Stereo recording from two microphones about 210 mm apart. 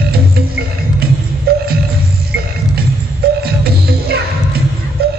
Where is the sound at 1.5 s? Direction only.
45° right (ahead or behind).